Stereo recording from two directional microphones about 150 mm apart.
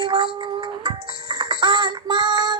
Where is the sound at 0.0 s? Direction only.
35° right (ahead or behind).